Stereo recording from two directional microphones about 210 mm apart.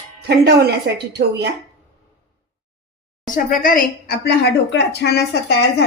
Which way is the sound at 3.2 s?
40° left (ahead or behind).